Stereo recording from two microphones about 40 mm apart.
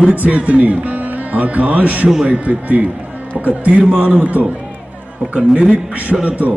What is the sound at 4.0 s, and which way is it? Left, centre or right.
Speech, right.